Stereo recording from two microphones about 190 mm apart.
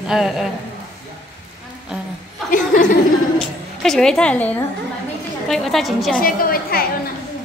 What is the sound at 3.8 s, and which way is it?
Speech, 5° left (ahead or behind).